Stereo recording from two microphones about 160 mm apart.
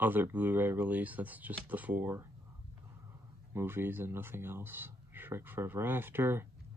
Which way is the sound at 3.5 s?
15° right (ahead or behind).